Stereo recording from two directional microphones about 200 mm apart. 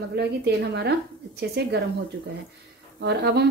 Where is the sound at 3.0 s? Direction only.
55° right (ahead or behind).